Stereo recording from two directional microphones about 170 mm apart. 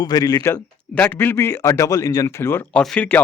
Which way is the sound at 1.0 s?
10° left (ahead or behind).